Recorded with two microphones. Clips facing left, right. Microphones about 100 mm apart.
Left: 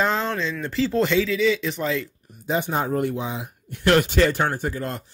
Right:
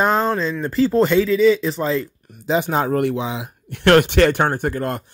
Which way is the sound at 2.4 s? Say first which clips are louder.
Right 5 dB; 90° right.